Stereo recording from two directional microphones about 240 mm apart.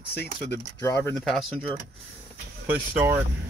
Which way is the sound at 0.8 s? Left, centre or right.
Centre.